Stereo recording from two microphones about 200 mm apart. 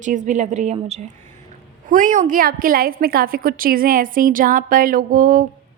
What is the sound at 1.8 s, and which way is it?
A woman's voice, 40° right (ahead or behind).